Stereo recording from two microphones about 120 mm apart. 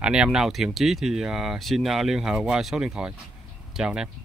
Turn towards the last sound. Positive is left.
turn(degrees=-5)  # may be behind; listen again after turning